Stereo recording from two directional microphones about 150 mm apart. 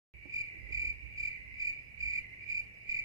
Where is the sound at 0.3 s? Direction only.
20° right (ahead or behind).